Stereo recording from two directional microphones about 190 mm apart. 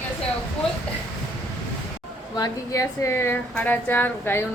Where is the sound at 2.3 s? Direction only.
20° left (ahead or behind).